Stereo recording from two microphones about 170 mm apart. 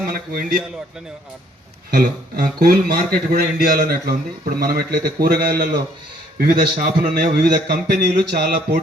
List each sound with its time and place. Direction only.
0.0 s a man's voice: 55° right (ahead or behind)
1.9 s a man's voice: 60° right (ahead or behind)